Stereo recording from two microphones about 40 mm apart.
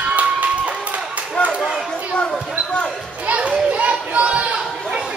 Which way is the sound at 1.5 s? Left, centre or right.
Centre.